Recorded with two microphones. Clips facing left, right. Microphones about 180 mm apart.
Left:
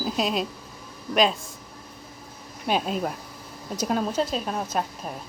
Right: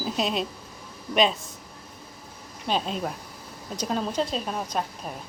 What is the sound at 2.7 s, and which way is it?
A woman's voice, 5° left (ahead or behind).